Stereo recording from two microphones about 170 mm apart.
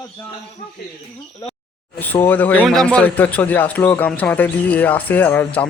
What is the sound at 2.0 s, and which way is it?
Speech, 10° left (ahead or behind).